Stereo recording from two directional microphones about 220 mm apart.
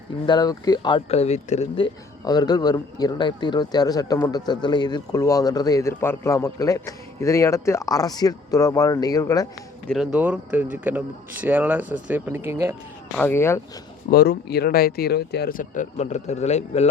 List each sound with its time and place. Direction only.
0.3 s speech: 20° left (ahead or behind)
9.8 s speech: centre (ahead or behind)
13.1 s speech: 10° left (ahead or behind)
14.1 s speech: 45° left (ahead or behind); by 16.9 s 30° left (ahead or behind)